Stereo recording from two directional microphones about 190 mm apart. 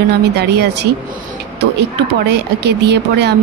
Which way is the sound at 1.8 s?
65° right (ahead or behind).